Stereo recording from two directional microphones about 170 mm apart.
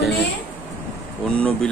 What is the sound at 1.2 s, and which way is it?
Speech, 5° left (ahead or behind).